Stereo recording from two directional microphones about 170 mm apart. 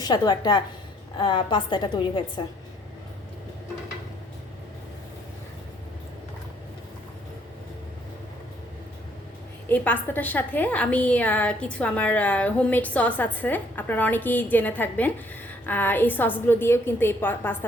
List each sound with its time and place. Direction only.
0.0 s a woman's voice: 25° left (ahead or behind)
9.6 s a woman's voice: 10° left (ahead or behind)